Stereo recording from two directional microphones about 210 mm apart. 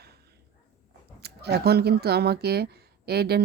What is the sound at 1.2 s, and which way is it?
Speech, 50° right (ahead or behind).